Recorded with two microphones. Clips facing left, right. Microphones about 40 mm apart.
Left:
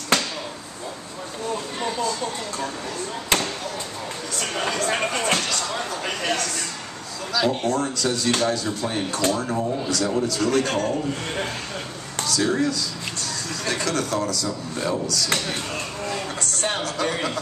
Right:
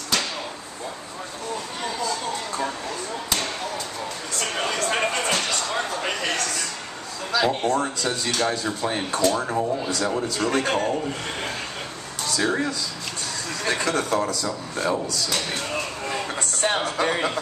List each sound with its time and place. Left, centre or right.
4.4 s speech: centre
7.3 s speech: centre
12.3 s speech: centre